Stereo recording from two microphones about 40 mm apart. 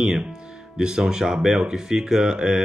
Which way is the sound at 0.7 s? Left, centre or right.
Centre.